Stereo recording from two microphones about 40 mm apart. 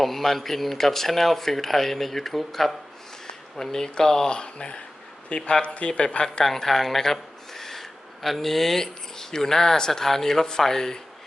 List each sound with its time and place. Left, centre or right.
0.0 s speech: centre; by 6.2 s left
6.4 s speech: centre